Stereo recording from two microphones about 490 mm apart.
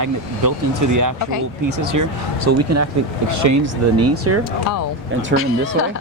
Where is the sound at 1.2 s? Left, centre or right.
Left.